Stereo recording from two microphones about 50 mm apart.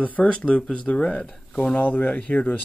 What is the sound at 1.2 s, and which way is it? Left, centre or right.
Speech, centre.